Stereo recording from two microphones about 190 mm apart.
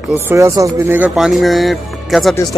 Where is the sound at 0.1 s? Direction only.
15° right (ahead or behind); by 2.3 s centre (ahead or behind).